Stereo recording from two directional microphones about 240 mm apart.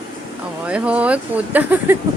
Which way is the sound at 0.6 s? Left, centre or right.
Centre.